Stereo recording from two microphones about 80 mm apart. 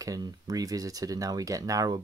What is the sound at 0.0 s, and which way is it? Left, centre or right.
Speech, right.